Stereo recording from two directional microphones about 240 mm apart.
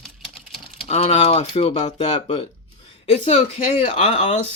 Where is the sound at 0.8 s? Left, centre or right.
Left.